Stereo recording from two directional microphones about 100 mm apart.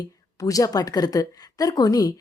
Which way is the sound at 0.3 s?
35° left (ahead or behind).